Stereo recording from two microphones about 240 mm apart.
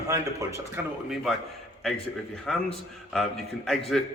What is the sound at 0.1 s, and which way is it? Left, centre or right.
Speech, centre.